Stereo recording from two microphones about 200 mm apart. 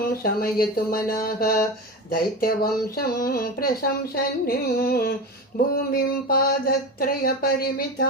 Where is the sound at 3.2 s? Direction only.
50° left (ahead or behind).